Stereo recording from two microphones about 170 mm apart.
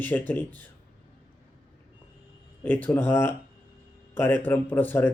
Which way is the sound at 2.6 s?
10° left (ahead or behind).